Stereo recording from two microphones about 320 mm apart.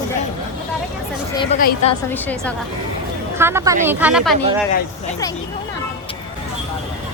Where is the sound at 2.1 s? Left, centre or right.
Centre.